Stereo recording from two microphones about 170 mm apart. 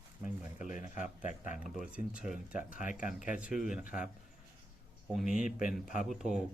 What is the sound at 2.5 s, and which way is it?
Speech, 50° left (ahead or behind).